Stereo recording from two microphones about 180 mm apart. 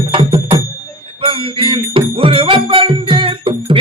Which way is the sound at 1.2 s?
30° right (ahead or behind).